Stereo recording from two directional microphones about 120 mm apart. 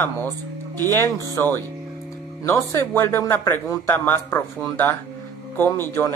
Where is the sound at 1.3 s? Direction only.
20° left (ahead or behind).